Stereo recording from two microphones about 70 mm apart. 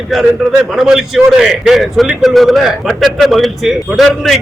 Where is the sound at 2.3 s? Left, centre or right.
Centre.